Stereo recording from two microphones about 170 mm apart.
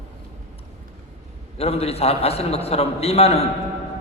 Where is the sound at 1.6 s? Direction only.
35° left (ahead or behind).